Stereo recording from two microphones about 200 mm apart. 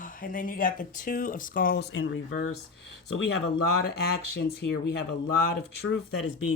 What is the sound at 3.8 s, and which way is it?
Speech, 55° left (ahead or behind).